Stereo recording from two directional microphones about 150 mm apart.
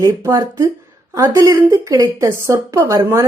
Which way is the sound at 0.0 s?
20° right (ahead or behind).